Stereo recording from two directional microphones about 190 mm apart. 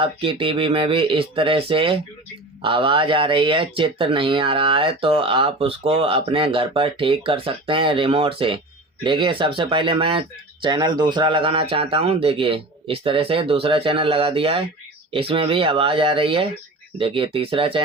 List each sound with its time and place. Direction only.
0.0 s speech: 30° right (ahead or behind)